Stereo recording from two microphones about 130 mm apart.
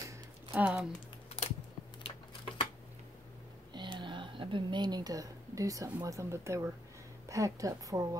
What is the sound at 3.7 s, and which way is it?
A woman's voice, 35° right (ahead or behind).